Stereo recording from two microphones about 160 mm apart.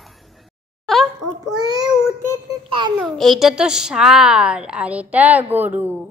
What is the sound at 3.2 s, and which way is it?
A woman's voice, centre (ahead or behind).